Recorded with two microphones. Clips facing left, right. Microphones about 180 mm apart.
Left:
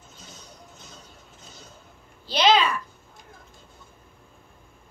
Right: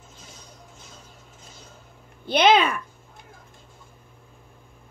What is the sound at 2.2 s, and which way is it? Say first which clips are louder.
Speech: right 2 dB; 55° right (ahead or behind).